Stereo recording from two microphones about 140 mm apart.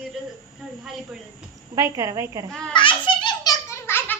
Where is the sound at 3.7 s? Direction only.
15° left (ahead or behind).